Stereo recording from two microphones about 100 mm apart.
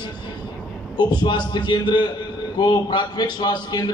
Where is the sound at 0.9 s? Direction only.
45° left (ahead or behind).